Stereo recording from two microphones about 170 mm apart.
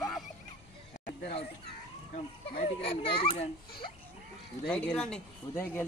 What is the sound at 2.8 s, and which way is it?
Speech, 30° left (ahead or behind).